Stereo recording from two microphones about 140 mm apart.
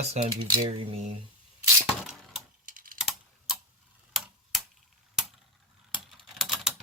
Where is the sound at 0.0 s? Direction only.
50° right (ahead or behind).